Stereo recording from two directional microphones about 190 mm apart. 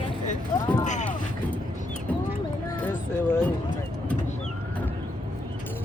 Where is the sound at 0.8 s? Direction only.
40° left (ahead or behind).